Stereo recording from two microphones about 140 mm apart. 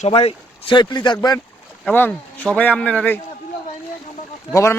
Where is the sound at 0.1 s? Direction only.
45° left (ahead or behind).